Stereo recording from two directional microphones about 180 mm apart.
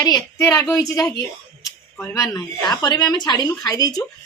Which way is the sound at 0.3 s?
15° left (ahead or behind).